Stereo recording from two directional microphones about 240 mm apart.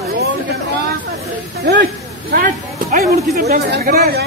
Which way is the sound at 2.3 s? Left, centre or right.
Right.